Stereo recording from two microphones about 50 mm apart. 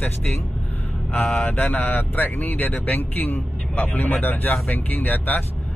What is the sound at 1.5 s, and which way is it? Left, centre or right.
Speech, left.